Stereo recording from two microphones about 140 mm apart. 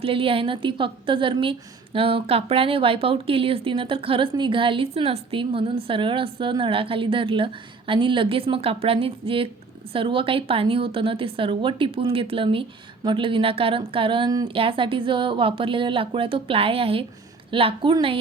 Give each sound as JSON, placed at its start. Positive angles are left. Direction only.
{"t": 0.0, "sound": "a woman's voice", "side_deg": -40}